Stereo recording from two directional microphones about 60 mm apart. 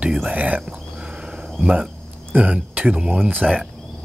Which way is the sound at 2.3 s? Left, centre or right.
Right.